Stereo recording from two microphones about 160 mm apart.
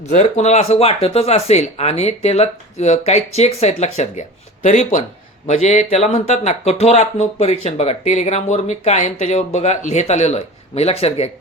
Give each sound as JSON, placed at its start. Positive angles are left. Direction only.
{"t": 0.1, "sound": "speech", "side_deg": 45}